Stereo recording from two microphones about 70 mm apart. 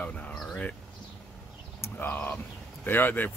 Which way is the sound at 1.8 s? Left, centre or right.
Left.